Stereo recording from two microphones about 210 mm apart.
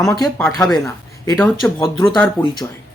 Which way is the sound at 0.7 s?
15° left (ahead or behind).